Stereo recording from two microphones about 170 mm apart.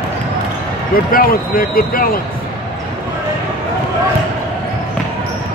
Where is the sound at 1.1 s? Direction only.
60° left (ahead or behind).